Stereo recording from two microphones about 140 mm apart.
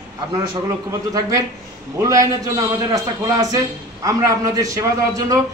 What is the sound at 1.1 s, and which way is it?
A man's voice, 25° right (ahead or behind).